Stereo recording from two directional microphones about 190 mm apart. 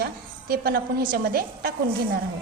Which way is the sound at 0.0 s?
55° right (ahead or behind).